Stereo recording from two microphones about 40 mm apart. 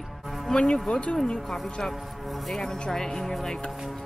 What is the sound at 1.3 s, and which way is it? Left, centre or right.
Speech, centre.